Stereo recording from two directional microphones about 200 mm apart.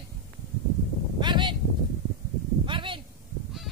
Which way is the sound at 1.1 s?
20° right (ahead or behind).